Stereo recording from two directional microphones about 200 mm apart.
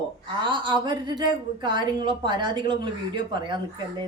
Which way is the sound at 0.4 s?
25° right (ahead or behind).